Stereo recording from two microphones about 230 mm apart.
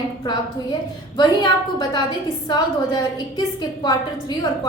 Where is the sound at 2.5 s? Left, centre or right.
Centre.